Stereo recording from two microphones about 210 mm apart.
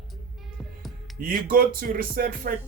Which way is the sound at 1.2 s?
45° right (ahead or behind).